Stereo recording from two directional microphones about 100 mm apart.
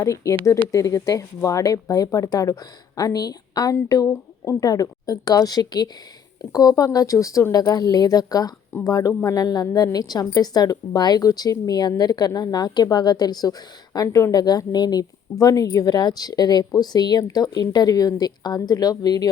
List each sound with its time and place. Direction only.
0.0 s a woman's voice: 30° left (ahead or behind)